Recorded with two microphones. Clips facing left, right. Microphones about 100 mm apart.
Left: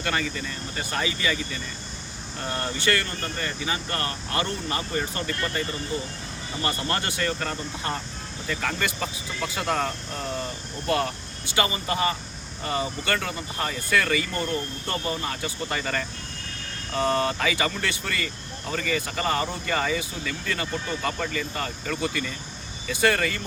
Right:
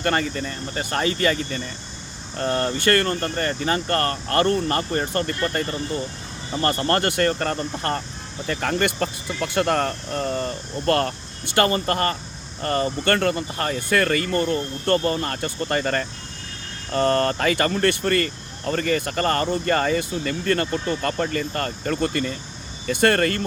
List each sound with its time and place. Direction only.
0.0 s speech: 45° right (ahead or behind)
2.4 s speech: 60° right (ahead or behind)
11.4 s speech: 60° right (ahead or behind)
14.8 s speech: 60° right (ahead or behind)
15.7 s speech: 45° right (ahead or behind)
16.9 s speech: 65° right (ahead or behind)